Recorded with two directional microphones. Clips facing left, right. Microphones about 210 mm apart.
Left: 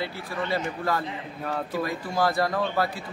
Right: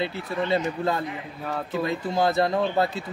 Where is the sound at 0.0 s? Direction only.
25° right (ahead or behind).